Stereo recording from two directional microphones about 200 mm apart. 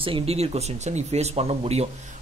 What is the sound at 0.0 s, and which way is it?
Speech, 30° right (ahead or behind).